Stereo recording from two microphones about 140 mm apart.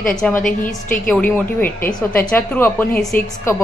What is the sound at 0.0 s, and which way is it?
A woman's voice, 5° left (ahead or behind).